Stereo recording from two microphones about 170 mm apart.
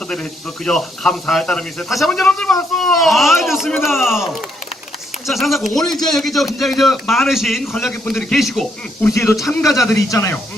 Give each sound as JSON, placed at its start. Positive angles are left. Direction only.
{"t": 0.1, "sound": "speech", "side_deg": 5}
{"t": 9.0, "sound": "speech", "side_deg": 15}